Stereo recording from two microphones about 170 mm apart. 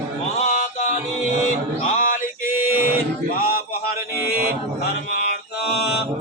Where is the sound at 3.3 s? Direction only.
60° left (ahead or behind).